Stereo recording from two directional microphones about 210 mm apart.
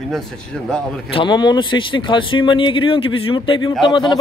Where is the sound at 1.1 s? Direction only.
20° left (ahead or behind).